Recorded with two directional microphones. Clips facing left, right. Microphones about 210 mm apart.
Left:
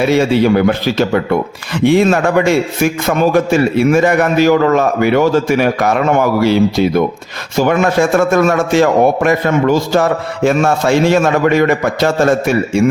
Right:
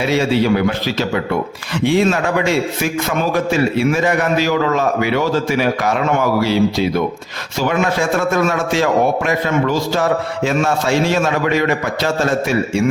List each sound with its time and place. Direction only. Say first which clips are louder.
0.0 s a man's voice: left 4 dB; 50° left (ahead or behind)